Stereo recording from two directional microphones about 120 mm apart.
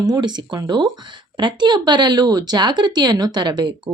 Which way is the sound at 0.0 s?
35° right (ahead or behind).